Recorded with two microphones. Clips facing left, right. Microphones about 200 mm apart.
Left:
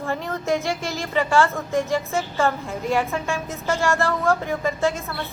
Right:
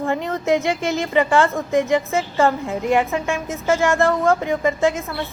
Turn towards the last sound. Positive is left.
turn(degrees=-15)  # may be behind; listen again after turning